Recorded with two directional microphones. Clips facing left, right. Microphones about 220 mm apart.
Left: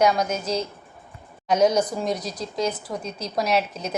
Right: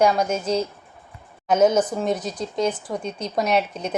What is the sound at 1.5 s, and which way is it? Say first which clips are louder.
Speech: right 2 dB; 5° right (ahead or behind).